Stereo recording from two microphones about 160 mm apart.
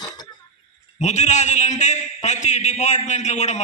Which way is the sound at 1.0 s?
45° left (ahead or behind).